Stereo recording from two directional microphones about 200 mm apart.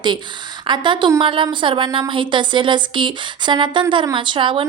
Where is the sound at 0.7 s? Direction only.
25° right (ahead or behind).